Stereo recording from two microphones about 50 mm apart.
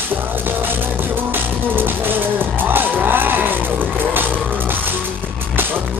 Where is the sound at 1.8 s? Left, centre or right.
Right.